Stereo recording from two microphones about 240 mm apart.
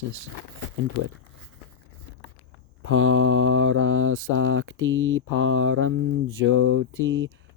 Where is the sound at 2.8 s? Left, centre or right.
Right.